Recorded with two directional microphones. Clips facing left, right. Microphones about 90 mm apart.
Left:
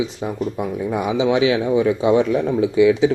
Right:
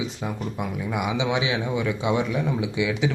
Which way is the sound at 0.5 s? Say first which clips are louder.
Left 6 dB; 35° left (ahead or behind).